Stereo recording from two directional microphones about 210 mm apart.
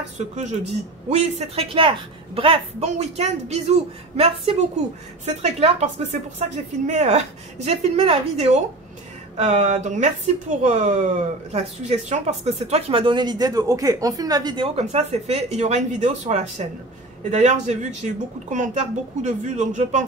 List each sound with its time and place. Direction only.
0.2 s speech: 35° right (ahead or behind)
6.9 s speech: 30° right (ahead or behind)